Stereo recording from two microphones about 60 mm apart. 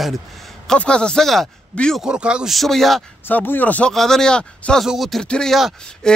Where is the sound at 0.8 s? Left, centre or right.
Centre.